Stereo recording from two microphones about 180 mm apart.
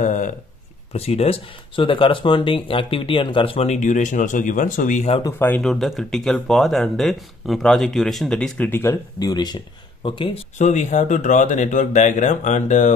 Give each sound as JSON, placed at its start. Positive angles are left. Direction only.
{"t": 0.0, "sound": "a sound", "side_deg": 45}
{"t": 0.9, "sound": "speech", "side_deg": 35}
{"t": 5.2, "sound": "speech", "side_deg": 10}
{"t": 10.6, "sound": "speech", "side_deg": 40}